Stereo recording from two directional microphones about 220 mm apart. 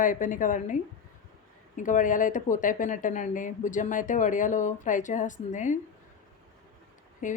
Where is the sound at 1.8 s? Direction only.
35° left (ahead or behind).